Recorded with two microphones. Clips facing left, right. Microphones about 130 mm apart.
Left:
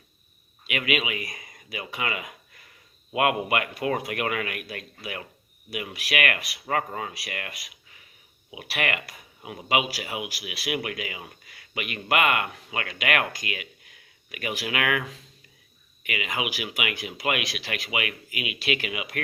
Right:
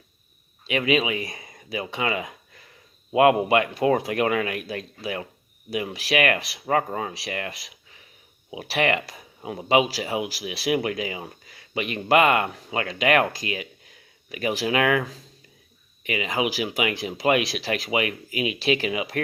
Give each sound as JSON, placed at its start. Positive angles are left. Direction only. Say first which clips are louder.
{"t": 0.7, "sound": "speech", "louder": "right 5 dB", "side_deg": -30}